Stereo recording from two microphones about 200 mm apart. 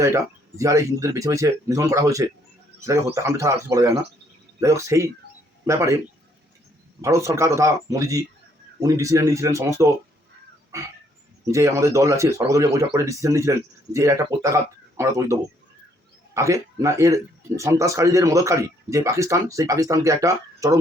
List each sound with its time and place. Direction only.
0.0 s a man's voice: 15° right (ahead or behind)
7.0 s a man's voice: 15° right (ahead or behind)
10.7 s a sound: 15° right (ahead or behind)
11.5 s a man's voice: 15° right (ahead or behind)